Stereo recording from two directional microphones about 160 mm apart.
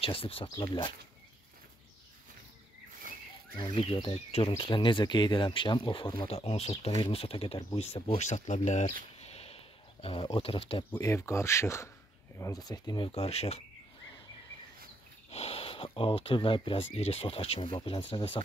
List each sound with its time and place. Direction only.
0.0 s speech: 35° left (ahead or behind)
3.6 s speech: 35° left (ahead or behind)
9.2 s a sound: 40° left (ahead or behind)
10.0 s speech: 35° left (ahead or behind)
10.9 s speech: 15° left (ahead or behind); by 13.6 s 40° left (ahead or behind)
15.3 s speech: 40° left (ahead or behind)